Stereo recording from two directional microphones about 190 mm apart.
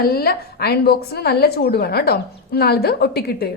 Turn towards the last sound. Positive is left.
turn(degrees=55)  # may be behind; listen again after turning